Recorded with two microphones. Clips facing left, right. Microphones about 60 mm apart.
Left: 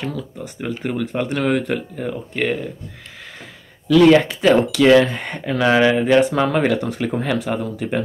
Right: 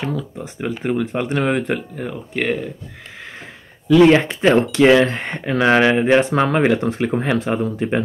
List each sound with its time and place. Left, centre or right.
0.0 s speech: right
2.0 s speech: centre
3.9 s speech: right